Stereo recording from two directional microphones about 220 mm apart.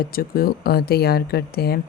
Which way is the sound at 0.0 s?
40° left (ahead or behind).